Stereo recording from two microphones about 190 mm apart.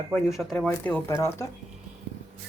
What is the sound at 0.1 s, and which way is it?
Speech, centre (ahead or behind).